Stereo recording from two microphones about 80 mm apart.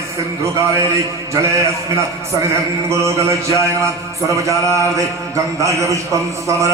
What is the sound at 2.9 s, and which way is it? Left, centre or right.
A man's voice, right.